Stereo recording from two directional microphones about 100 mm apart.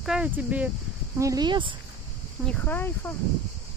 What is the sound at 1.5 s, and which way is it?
Speech, 55° right (ahead or behind).